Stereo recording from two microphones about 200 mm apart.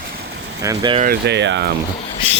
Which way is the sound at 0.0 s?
50° right (ahead or behind).